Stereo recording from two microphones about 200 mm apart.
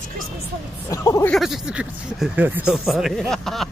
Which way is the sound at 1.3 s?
Centre (ahead or behind).